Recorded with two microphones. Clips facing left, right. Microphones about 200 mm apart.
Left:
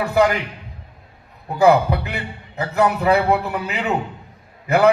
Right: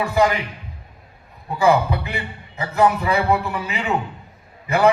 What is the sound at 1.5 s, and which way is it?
A man's voice, 65° left (ahead or behind).